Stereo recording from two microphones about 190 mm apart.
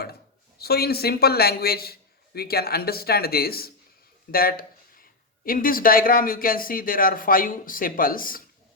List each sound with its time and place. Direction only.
0.6 s a man's voice: 55° left (ahead or behind)
4.3 s a sound: 50° left (ahead or behind)
5.5 s speech: 50° left (ahead or behind)